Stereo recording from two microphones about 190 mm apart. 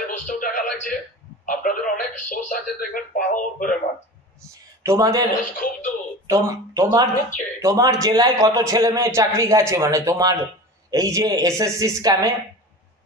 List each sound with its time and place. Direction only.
0.3 s music: 45° left (ahead or behind)
1.4 s a sound: 45° left (ahead or behind)
1.9 s a man's voice: 45° left (ahead or behind)
4.8 s a man's voice: 20° right (ahead or behind)
5.6 s a man's voice: 45° left (ahead or behind)
6.2 s a man's voice: 15° right (ahead or behind)